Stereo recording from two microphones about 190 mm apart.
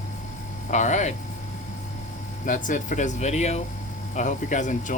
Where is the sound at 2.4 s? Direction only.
45° left (ahead or behind).